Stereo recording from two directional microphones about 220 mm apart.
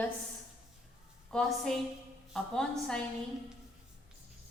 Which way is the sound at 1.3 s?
Centre (ahead or behind).